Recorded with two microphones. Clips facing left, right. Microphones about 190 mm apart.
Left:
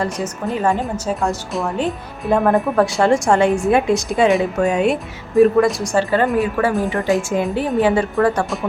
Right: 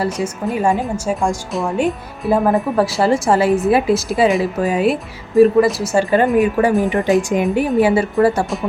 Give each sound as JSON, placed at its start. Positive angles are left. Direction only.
{"t": 0.0, "sound": "a woman's voice", "side_deg": -10}
{"t": 6.3, "sound": "a woman's voice", "side_deg": -15}